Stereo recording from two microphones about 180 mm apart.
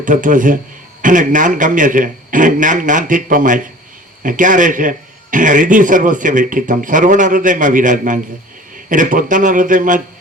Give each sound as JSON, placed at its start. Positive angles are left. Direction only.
{"t": 0.0, "sound": "a man's voice", "side_deg": -45}